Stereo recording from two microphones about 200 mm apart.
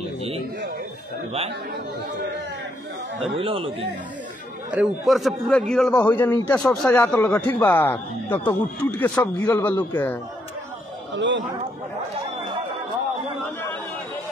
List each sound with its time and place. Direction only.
3.3 s speech: 25° right (ahead or behind)
4.6 s a man's voice: 5° right (ahead or behind)
11.1 s speech: 70° right (ahead or behind)